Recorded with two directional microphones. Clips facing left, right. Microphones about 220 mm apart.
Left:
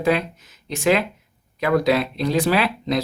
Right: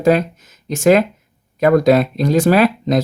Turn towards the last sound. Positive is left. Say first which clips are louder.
# right 7 dB
turn(degrees=-45)  # may be behind; listen again after turning